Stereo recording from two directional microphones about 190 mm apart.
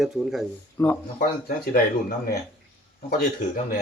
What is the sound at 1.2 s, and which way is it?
Speech, 50° left (ahead or behind).